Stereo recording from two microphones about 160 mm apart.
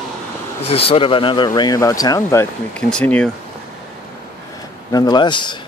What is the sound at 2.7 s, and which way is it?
Speech, 5° left (ahead or behind).